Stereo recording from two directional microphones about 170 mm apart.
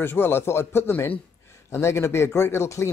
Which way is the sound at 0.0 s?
15° left (ahead or behind).